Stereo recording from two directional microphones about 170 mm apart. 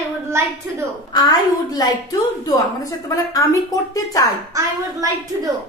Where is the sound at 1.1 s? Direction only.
25° left (ahead or behind).